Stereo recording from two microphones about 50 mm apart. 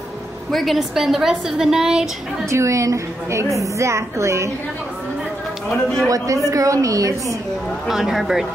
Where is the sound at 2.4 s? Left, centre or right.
Right.